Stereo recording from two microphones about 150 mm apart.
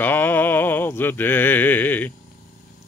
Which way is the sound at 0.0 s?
15° left (ahead or behind).